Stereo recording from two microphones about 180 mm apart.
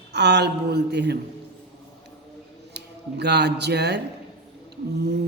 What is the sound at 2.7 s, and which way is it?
Speech, 70° right (ahead or behind).